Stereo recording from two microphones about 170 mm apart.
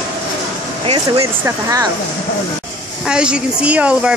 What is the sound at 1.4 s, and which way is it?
Speech, 20° right (ahead or behind).